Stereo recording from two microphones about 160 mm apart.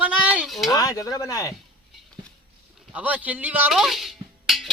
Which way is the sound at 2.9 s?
10° right (ahead or behind).